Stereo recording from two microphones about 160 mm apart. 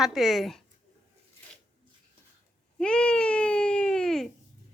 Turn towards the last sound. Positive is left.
turn(degrees=5)  # may be behind; listen again after turning